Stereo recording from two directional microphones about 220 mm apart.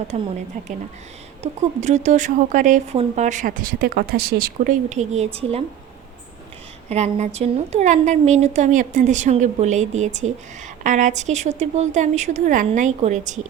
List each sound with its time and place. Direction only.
0.1 s speech: 30° right (ahead or behind)
1.4 s speech: 30° right (ahead or behind)
6.9 s speech: 30° right (ahead or behind)